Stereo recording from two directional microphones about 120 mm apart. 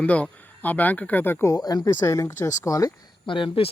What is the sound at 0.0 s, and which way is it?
Speech, 10° left (ahead or behind).